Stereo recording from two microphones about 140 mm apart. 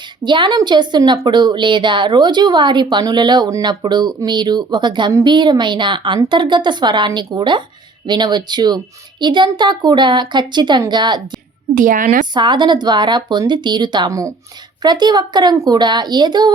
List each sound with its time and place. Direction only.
0.2 s a woman's voice: 35° right (ahead or behind)
11.7 s a woman's voice: 70° right (ahead or behind)
12.3 s a woman's voice: 35° right (ahead or behind)